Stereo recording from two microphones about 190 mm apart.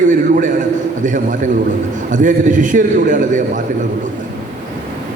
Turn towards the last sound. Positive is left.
turn(degrees=-45)  # may be behind; listen again after turning